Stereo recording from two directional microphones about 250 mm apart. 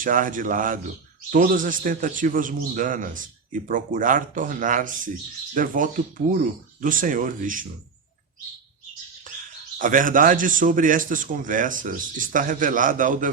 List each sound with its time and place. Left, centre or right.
0.0 s a man's voice: right
9.7 s a man's voice: right